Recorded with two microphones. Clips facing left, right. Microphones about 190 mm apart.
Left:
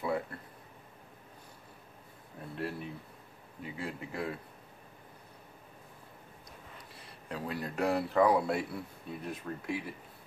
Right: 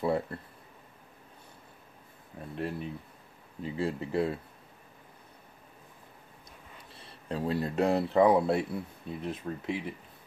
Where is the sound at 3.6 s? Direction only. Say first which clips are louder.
Right 8 dB; 30° right (ahead or behind).